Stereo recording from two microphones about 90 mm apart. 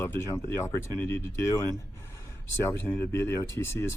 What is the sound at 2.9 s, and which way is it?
Speech, 25° left (ahead or behind).